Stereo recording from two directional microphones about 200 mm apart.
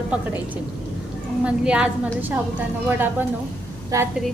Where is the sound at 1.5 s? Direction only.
5° right (ahead or behind).